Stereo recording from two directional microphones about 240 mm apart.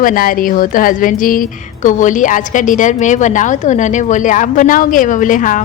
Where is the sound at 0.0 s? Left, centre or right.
Left.